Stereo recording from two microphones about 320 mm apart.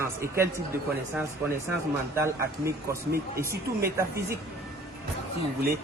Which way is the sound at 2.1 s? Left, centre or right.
Centre.